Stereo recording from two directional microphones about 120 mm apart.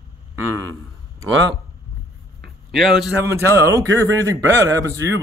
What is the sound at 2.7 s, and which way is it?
Speech, centre (ahead or behind).